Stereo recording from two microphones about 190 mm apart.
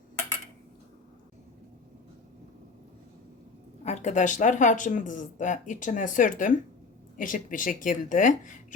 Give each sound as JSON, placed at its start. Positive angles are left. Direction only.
{"t": 3.8, "sound": "speech", "side_deg": 40}